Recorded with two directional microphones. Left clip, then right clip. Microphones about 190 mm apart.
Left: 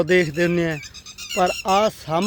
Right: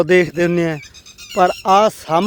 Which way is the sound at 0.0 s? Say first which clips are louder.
Right 4 dB; 35° right (ahead or behind).